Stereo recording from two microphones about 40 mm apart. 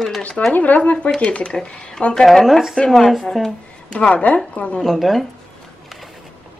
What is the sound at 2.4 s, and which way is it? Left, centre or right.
Speech, centre.